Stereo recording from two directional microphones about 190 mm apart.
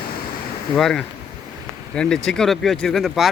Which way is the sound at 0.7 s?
5° left (ahead or behind).